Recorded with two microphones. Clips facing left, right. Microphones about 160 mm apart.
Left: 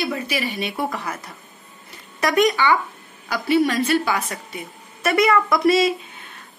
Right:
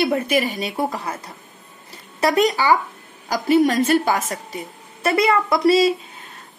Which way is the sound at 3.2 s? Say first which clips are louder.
Right 3 dB; 40° right (ahead or behind).